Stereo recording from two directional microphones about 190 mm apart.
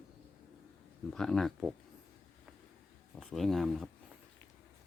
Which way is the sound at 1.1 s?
5° left (ahead or behind).